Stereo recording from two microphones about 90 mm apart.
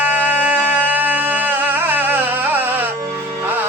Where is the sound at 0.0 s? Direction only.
20° right (ahead or behind).